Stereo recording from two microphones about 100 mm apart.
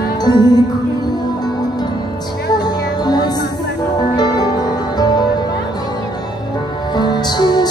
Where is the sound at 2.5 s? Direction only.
45° left (ahead or behind).